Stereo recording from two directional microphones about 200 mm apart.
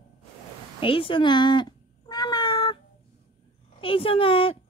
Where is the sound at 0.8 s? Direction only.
25° left (ahead or behind).